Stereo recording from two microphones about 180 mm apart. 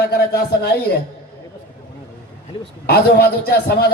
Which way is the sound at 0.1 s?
60° left (ahead or behind).